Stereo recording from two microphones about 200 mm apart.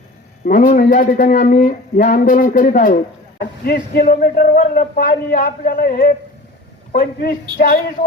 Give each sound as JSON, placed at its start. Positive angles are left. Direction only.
{"t": 0.4, "sound": "speech", "side_deg": 45}